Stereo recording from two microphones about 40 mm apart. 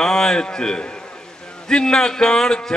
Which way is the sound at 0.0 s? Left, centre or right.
Centre.